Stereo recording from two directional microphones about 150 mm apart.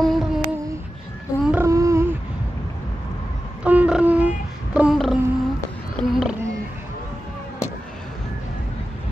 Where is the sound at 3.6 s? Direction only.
10° right (ahead or behind).